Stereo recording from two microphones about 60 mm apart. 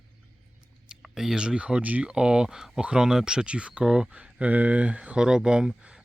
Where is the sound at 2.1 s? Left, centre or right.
Centre.